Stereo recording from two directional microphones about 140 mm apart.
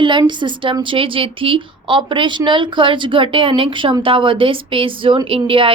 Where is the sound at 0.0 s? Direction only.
35° right (ahead or behind).